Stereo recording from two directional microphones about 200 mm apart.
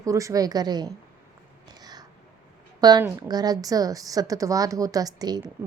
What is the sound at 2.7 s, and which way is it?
A woman's voice, 20° right (ahead or behind).